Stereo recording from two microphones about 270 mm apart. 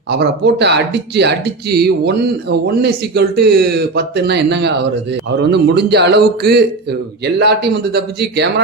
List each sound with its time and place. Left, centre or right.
0.1 s speech: right